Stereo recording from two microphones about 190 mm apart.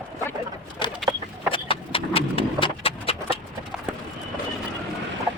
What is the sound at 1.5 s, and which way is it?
Horse, 30° left (ahead or behind).